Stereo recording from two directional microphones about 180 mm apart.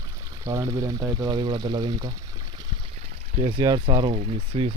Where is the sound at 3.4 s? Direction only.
25° right (ahead or behind).